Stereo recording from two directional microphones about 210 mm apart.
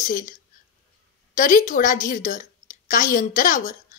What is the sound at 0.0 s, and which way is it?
Speech, 40° left (ahead or behind).